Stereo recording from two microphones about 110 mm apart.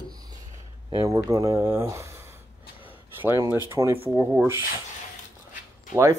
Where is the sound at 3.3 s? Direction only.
35° left (ahead or behind).